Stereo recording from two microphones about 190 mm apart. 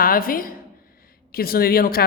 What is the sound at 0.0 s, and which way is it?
A woman's voice, 50° left (ahead or behind).